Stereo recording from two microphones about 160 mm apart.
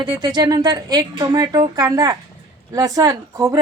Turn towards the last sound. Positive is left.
turn(degrees=-20)  # may be behind; listen again after turning